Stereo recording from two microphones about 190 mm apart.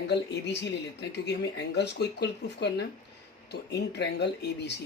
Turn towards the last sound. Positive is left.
turn(degrees=60)  # may be behind; listen again after turning